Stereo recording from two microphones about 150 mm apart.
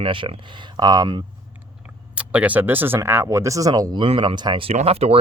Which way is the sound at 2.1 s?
10° right (ahead or behind).